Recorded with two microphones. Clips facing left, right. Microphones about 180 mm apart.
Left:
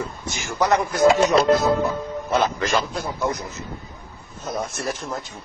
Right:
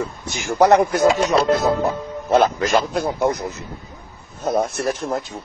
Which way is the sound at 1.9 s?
55° right (ahead or behind).